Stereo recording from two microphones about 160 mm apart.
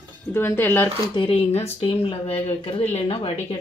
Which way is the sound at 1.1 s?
35° left (ahead or behind).